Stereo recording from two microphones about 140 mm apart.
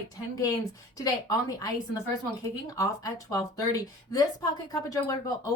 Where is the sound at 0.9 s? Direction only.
25° left (ahead or behind).